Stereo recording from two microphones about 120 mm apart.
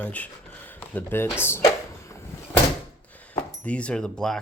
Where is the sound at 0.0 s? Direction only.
10° left (ahead or behind).